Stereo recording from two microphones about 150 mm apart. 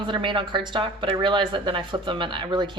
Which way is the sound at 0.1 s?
35° right (ahead or behind).